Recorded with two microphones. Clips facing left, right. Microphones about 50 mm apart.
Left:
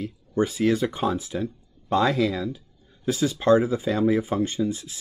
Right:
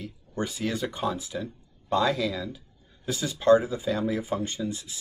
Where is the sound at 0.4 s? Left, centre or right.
Left.